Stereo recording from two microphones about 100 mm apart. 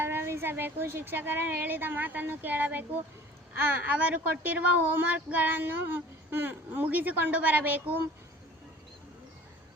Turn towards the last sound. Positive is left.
turn(degrees=-15)  # may be behind; listen again after turning